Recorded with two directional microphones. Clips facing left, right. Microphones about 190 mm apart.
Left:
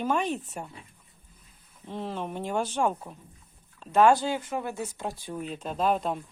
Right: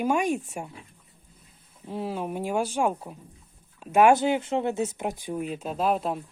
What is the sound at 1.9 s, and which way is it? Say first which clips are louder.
Speech: right 3 dB; 10° right (ahead or behind).